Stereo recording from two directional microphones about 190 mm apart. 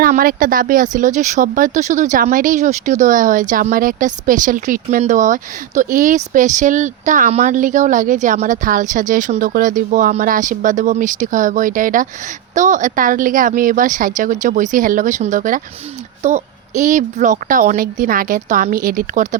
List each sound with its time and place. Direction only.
0.0 s speech: 50° right (ahead or behind)